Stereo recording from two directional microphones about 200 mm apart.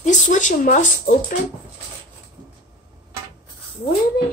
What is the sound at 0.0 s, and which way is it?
Speech, 35° left (ahead or behind).